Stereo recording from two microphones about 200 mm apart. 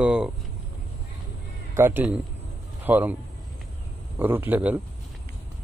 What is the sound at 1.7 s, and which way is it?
A man's voice, 10° right (ahead or behind).